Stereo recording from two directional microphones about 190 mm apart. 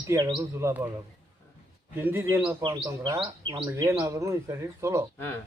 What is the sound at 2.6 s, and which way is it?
Speech, 20° right (ahead or behind).